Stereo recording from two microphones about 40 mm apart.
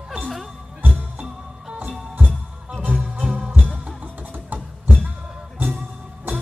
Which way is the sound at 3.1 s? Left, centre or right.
Right.